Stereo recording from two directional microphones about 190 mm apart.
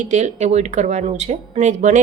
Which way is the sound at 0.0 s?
40° right (ahead or behind).